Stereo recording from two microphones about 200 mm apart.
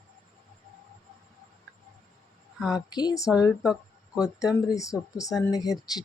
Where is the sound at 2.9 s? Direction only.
20° left (ahead or behind).